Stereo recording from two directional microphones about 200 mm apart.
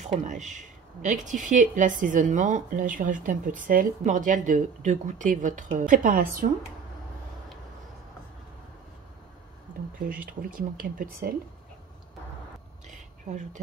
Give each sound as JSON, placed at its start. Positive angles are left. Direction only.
{"t": 0.0, "sound": "speech", "side_deg": -35}
{"t": 9.9, "sound": "speech", "side_deg": -45}
{"t": 12.9, "sound": "a sound", "side_deg": -35}